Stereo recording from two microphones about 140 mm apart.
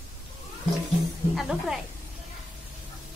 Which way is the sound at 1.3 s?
5° right (ahead or behind).